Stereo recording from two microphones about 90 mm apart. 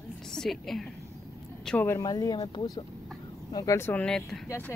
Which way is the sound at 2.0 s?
45° left (ahead or behind).